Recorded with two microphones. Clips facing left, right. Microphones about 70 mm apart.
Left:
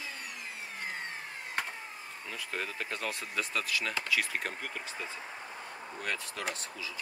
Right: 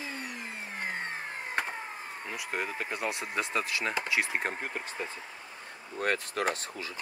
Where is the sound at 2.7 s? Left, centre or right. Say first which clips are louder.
Right 3 dB; right.